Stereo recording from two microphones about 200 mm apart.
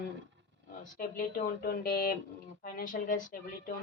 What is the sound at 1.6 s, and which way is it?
Speech, 45° left (ahead or behind).